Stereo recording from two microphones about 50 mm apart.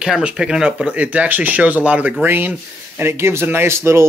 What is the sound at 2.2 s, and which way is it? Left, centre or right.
Speech, right.